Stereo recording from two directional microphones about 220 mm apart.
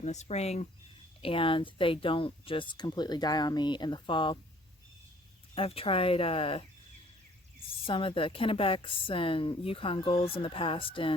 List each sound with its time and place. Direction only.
0.0 s a woman's voice: 30° left (ahead or behind)
5.5 s a woman's voice: 25° left (ahead or behind)